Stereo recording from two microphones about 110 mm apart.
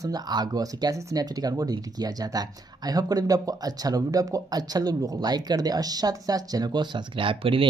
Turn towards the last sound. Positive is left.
turn(degrees=-55)  # may be behind; listen again after turning